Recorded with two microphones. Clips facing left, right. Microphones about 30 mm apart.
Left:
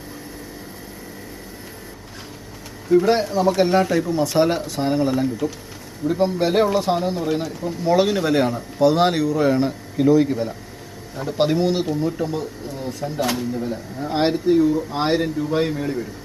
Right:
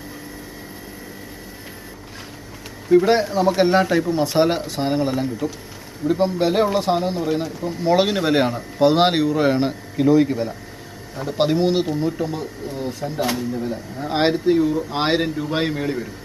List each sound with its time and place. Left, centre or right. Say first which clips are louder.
2.9 s speech: right 1 dB; centre
7.4 s speech: right 1 dB; right
9.9 s speech: even; centre
12.1 s speech: even; centre
14.0 s speech: right 1 dB; centre
14.9 s speech: even; right